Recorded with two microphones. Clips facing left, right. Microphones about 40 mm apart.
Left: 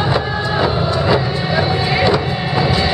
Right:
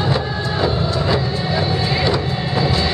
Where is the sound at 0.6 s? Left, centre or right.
Left.